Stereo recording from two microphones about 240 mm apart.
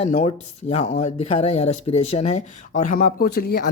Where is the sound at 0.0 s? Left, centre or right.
Left.